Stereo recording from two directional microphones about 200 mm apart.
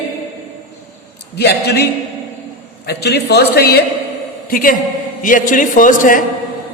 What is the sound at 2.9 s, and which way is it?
A woman's voice, 55° left (ahead or behind).